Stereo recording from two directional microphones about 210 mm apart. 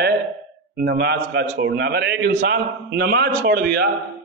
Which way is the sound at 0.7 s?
50° right (ahead or behind).